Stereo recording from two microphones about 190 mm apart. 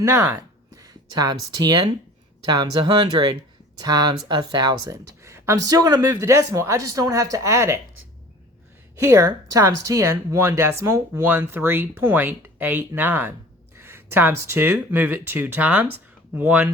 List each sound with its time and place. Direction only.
0.0 s speech: 15° right (ahead or behind)
9.0 s speech: 15° right (ahead or behind)